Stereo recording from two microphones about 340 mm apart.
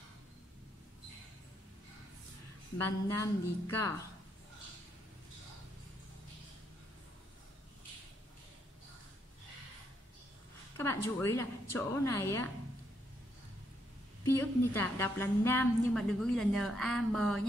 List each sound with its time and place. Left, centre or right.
2.8 s a woman's voice: centre
10.8 s a sound: centre
11.7 s a woman's voice: centre
14.2 s a woman's voice: centre